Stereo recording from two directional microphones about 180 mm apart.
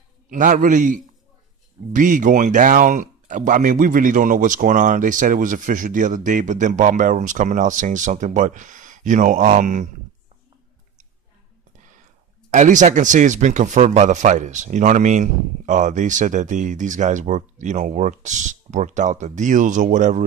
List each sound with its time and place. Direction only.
0.3 s speech: 45° right (ahead or behind)
12.4 s speech: 45° right (ahead or behind)